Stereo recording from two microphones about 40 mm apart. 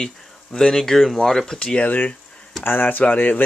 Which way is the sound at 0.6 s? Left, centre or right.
Centre.